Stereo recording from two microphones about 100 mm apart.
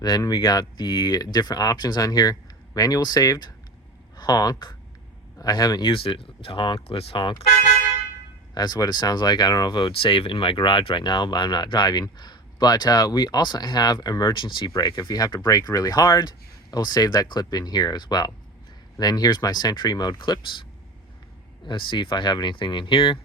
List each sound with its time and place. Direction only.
0.2 s speech: 40° left (ahead or behind)
5.9 s speech: 60° left (ahead or behind)
6.8 s speech: 75° left (ahead or behind)
8.5 s speech: 45° left (ahead or behind)
9.9 s speech: 65° left (ahead or behind); by 20.7 s 50° left (ahead or behind)
21.7 s speech: 55° left (ahead or behind)